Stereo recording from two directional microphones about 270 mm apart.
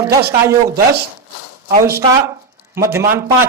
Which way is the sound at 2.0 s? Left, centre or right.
Centre.